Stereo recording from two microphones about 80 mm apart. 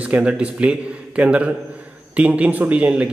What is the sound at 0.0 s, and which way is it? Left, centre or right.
A man's voice, centre.